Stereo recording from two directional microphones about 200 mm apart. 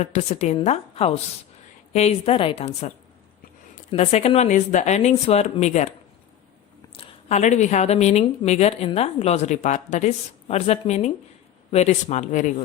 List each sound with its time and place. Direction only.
0.0 s a woman's voice: 35° left (ahead or behind)
3.9 s a woman's voice: 30° left (ahead or behind)
6.9 s a woman's voice: 30° left (ahead or behind)